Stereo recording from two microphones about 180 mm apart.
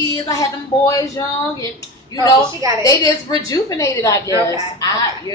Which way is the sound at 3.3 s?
20° left (ahead or behind).